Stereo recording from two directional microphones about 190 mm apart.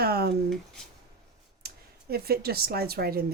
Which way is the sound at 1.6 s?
55° right (ahead or behind).